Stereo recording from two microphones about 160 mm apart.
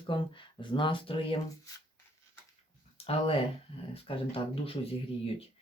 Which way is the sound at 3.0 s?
35° left (ahead or behind).